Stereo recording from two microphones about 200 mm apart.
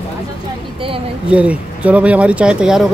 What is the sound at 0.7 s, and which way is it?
Speech, 25° right (ahead or behind).